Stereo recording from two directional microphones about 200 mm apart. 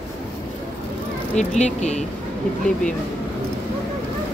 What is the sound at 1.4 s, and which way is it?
Speech, 35° left (ahead or behind).